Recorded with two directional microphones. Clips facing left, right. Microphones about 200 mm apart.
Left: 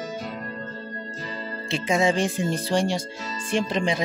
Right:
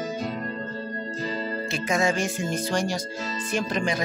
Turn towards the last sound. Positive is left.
turn(degrees=25)  # may be behind; listen again after turning